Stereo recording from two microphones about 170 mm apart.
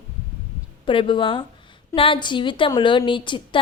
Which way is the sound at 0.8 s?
30° left (ahead or behind).